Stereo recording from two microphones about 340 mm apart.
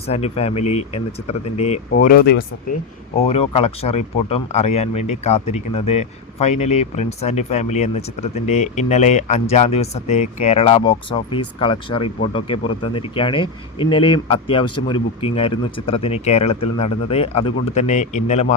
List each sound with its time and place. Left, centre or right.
0.1 s speech: centre